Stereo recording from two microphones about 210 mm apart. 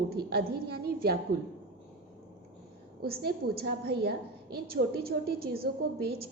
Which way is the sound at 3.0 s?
50° right (ahead or behind).